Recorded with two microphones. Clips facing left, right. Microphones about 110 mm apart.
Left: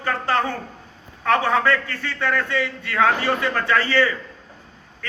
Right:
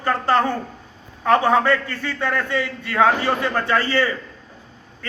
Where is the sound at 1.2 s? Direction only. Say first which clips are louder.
Right 3 dB; 15° right (ahead or behind).